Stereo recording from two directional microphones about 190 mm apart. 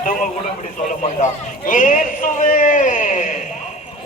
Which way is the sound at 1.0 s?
40° left (ahead or behind).